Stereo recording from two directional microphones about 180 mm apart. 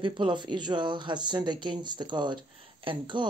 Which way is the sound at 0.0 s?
25° right (ahead or behind).